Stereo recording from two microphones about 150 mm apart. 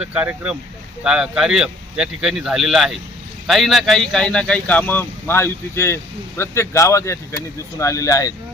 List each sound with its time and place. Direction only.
0.0 s speech: 10° right (ahead or behind); by 8.3 s 20° left (ahead or behind)